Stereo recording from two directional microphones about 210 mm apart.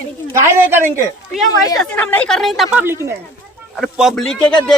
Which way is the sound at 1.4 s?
15° left (ahead or behind).